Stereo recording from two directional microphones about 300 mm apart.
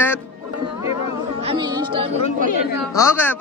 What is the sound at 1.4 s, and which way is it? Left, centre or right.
Chatter, centre.